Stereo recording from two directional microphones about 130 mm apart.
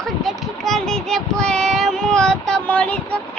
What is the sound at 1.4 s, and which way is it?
Child singing, 5° left (ahead or behind).